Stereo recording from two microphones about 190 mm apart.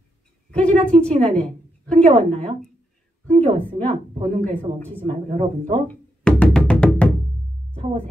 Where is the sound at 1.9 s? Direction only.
35° right (ahead or behind).